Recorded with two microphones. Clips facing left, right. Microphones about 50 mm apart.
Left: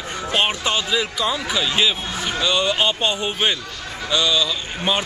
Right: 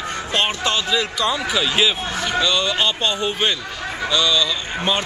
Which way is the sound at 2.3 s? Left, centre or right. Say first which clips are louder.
Even; centre.